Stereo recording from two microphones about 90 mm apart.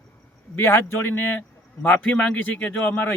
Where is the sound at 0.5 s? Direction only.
30° left (ahead or behind).